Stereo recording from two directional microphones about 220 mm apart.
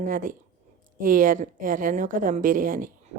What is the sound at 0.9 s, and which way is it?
Speech, 40° right (ahead or behind).